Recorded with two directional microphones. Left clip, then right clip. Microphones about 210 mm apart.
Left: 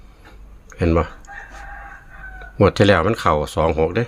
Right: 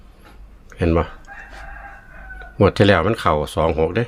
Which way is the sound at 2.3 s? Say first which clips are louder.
Even; centre (ahead or behind).